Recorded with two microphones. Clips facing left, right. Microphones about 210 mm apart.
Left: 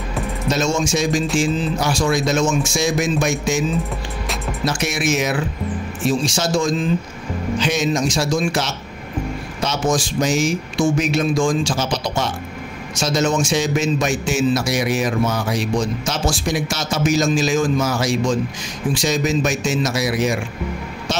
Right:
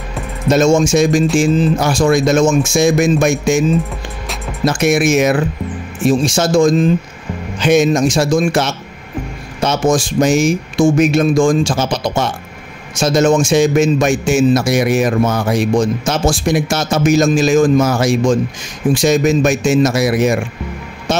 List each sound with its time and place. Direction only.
0.5 s speech: 50° right (ahead or behind)
4.6 s speech: 55° right (ahead or behind)
21.1 s music: 55° right (ahead or behind)